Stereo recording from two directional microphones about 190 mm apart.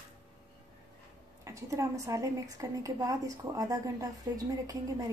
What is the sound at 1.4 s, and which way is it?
A woman's voice, 15° right (ahead or behind).